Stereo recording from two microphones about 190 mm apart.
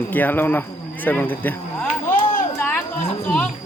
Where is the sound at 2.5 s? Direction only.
10° left (ahead or behind).